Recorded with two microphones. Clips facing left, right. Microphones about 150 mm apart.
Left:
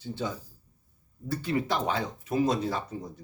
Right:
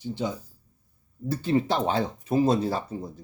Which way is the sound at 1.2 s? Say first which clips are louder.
Right 5 dB; 25° right (ahead or behind).